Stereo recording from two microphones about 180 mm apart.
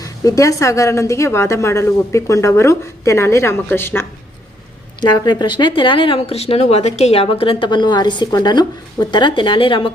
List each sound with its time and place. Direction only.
0.0 s a woman's voice: 20° left (ahead or behind)
4.9 s speech: 25° left (ahead or behind)